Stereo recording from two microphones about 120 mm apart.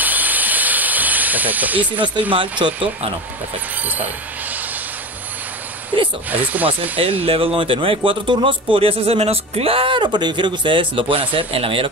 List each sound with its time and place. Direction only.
0.0 s steam: 15° right (ahead or behind)
2.6 s speech: 50° right (ahead or behind)
5.9 s a sound: 45° right (ahead or behind)
6.3 s speech: 15° right (ahead or behind)
7.0 s speech: 50° right (ahead or behind)